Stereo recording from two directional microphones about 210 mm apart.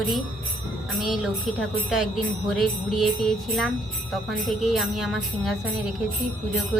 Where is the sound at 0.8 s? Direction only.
Centre (ahead or behind).